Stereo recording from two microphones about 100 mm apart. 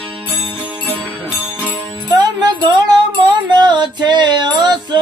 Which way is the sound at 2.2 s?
45° right (ahead or behind).